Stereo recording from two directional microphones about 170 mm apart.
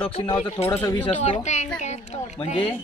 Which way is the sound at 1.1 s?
40° left (ahead or behind).